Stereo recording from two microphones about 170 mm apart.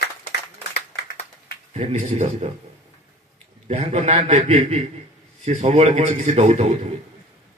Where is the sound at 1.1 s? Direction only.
65° left (ahead or behind).